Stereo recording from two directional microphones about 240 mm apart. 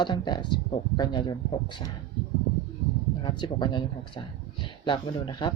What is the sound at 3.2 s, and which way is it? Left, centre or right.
Speech, centre.